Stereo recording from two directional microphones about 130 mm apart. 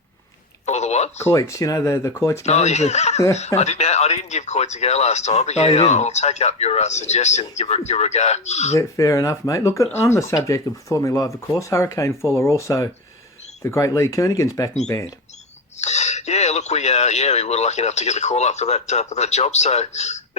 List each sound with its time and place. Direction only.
0.6 s speech: 60° left (ahead or behind)
1.2 s speech: 25° left (ahead or behind)
2.4 s speech: 60° left (ahead or behind)
8.7 s speech: 25° left (ahead or behind)
15.8 s speech: 60° left (ahead or behind)